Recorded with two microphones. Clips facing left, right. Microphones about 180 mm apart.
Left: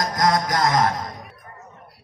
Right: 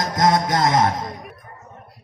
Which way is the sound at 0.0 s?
25° right (ahead or behind).